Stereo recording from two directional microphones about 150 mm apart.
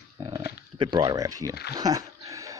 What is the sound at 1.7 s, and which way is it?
Dog, 25° right (ahead or behind).